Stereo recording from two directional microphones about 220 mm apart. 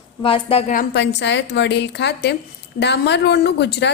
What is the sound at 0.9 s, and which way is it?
A woman's voice, 55° left (ahead or behind).